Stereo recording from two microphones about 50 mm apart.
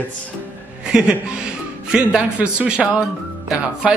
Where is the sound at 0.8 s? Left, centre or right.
Centre.